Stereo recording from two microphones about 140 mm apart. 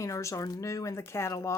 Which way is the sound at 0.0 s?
20° left (ahead or behind).